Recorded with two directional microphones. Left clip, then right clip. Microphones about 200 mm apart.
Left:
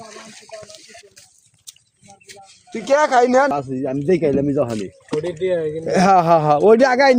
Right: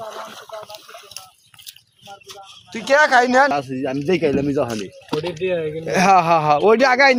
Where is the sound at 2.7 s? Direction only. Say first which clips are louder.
Right 1 dB; 50° left (ahead or behind); by 5.7 s 25° left (ahead or behind).